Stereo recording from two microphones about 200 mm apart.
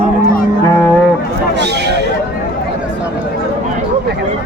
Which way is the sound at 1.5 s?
60° right (ahead or behind).